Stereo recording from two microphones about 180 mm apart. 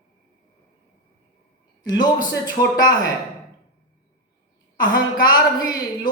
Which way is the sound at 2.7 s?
20° left (ahead or behind).